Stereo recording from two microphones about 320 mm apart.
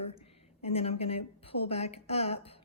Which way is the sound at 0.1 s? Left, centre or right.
Centre.